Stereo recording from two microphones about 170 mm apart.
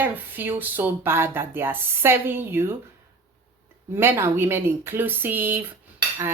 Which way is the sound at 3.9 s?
15° right (ahead or behind).